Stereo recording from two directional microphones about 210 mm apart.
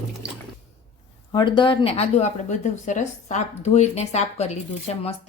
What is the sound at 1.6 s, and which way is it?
A woman's voice, 25° left (ahead or behind).